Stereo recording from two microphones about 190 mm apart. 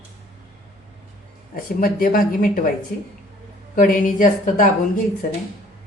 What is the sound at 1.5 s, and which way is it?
Speech, 50° left (ahead or behind).